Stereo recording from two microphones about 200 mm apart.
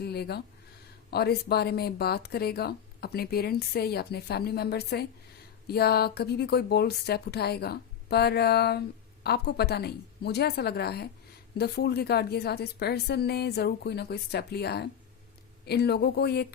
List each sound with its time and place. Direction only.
0.0 s speech: 55° left (ahead or behind)